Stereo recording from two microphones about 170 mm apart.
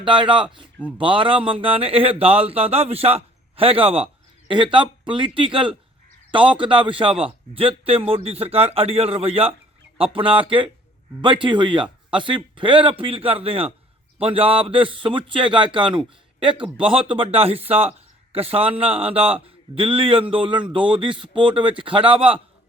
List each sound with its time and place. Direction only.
0.0 s a man's voice: 30° right (ahead or behind)